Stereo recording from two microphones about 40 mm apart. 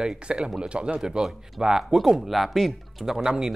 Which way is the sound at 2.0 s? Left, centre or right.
Centre.